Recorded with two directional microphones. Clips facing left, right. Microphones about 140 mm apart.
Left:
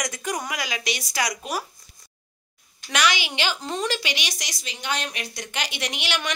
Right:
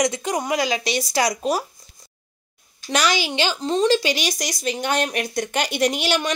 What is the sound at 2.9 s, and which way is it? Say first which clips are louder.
A woman's voice: right 3 dB; 35° right (ahead or behind).